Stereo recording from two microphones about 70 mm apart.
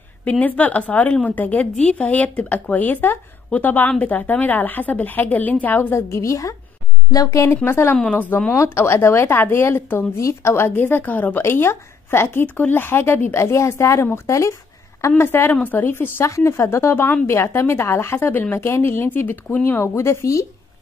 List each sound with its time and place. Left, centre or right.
0.2 s speech: left
5.9 s speech: left
7.2 s speech: left
7.9 s speech: centre
8.5 s speech: left
19.8 s speech: left